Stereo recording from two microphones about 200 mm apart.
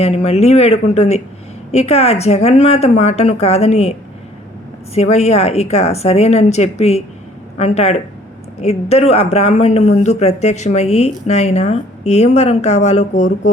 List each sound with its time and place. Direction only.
0.0 s speech: 30° left (ahead or behind)
4.9 s speech: 35° left (ahead or behind)